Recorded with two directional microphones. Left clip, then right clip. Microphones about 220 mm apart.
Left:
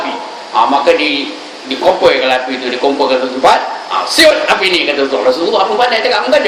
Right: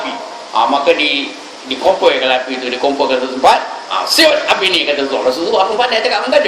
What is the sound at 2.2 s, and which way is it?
A man's voice, 10° right (ahead or behind).